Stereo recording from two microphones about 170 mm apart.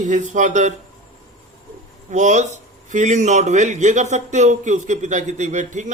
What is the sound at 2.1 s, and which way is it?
A man's voice, 45° right (ahead or behind).